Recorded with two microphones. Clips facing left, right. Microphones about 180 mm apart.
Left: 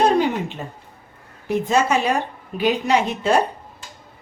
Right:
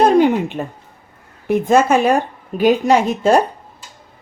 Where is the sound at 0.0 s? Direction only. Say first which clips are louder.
Right 6 dB; 55° right (ahead or behind).